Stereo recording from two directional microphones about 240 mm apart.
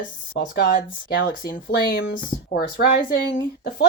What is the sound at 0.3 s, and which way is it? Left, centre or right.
Speech, left.